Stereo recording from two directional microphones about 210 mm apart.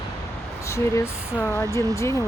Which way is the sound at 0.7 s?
15° left (ahead or behind).